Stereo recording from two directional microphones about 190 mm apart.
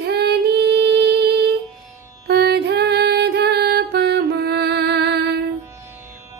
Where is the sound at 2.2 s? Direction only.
60° right (ahead or behind).